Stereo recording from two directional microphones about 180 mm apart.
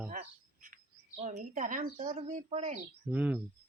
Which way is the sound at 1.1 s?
40° right (ahead or behind).